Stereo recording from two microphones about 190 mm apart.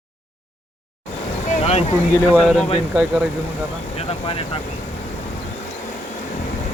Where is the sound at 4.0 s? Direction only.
30° left (ahead or behind).